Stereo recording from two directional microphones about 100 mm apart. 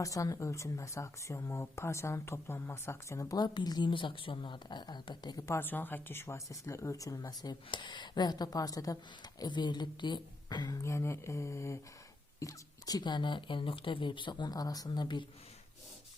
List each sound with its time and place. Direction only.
0.0 s speech: 35° left (ahead or behind)
5.5 s speech: 20° left (ahead or behind); by 9.0 s 35° left (ahead or behind)
9.4 s speech: 45° left (ahead or behind)